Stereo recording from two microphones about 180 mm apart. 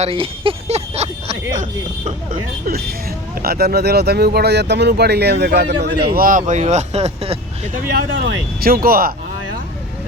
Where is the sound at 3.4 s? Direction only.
60° right (ahead or behind); by 7.4 s 35° right (ahead or behind).